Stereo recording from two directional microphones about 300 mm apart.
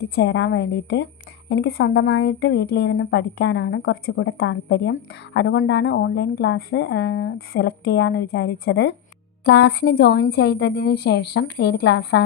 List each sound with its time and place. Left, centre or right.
0.0 s a woman's voice: left